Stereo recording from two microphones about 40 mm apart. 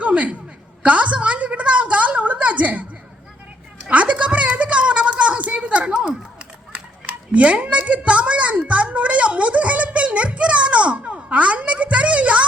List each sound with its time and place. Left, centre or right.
0.0 s a sound: right
0.8 s a woman's voice: right
3.8 s speech: right
7.3 s a woman's voice: right